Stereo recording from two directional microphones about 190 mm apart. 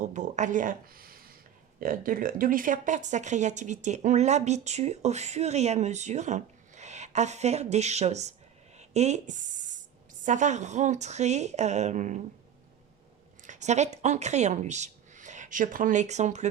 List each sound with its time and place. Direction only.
0.0 s speech: 40° right (ahead or behind)
13.4 s speech: 40° right (ahead or behind)